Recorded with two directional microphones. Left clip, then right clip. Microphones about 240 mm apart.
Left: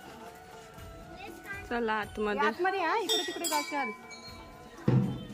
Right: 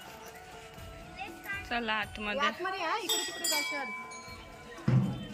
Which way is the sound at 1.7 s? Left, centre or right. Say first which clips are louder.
Left 2 dB; centre.